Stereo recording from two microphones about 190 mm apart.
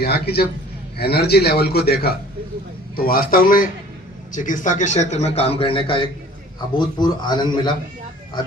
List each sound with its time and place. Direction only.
0.0 s a man's voice: 55° left (ahead or behind); by 7.7 s 25° left (ahead or behind)